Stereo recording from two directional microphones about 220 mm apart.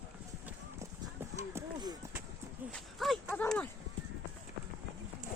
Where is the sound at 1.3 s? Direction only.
15° right (ahead or behind).